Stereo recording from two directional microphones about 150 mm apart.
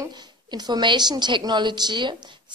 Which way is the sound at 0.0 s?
30° right (ahead or behind).